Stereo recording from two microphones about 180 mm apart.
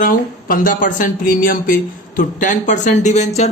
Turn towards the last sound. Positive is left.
turn(degrees=40)  # may be behind; listen again after turning